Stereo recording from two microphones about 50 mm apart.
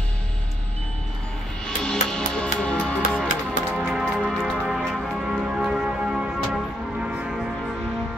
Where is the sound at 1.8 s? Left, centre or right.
Centre.